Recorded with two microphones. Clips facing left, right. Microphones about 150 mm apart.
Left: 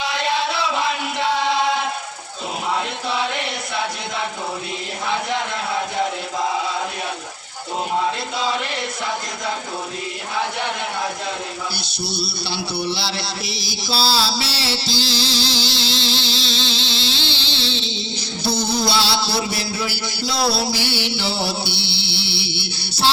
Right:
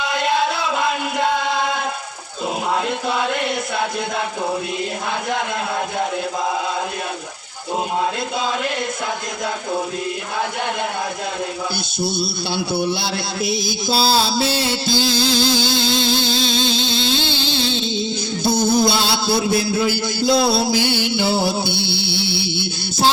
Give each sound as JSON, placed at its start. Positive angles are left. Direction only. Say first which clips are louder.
{"t": 0.0, "sound": "a sound", "louder": "right 3 dB", "side_deg": -50}
{"t": 1.2, "sound": "chant", "louder": "even", "side_deg": -50}
{"t": 11.9, "sound": "mantra", "louder": "right 6 dB", "side_deg": -50}
{"t": 18.4, "sound": "a man's voice", "louder": "right 5 dB", "side_deg": -50}
{"t": 20.7, "sound": "music", "louder": "right 5 dB", "side_deg": -50}